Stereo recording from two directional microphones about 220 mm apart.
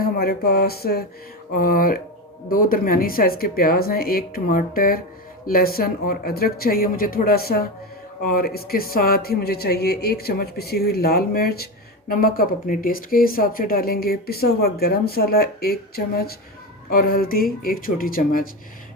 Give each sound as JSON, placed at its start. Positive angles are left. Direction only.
{"t": 0.0, "sound": "speech", "side_deg": 45}